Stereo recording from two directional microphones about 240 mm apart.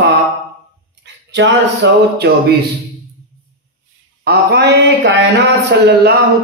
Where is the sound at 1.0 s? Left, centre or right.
Right.